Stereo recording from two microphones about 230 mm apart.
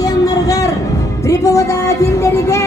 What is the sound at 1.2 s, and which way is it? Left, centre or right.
Speech, centre.